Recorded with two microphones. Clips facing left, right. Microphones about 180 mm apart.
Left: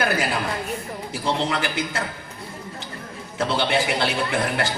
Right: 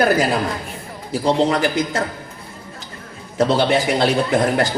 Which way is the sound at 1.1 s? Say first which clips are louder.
Right 8 dB; 40° right (ahead or behind).